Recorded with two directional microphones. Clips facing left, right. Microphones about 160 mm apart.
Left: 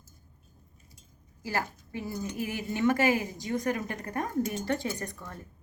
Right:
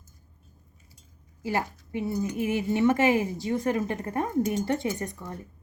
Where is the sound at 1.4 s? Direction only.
20° right (ahead or behind).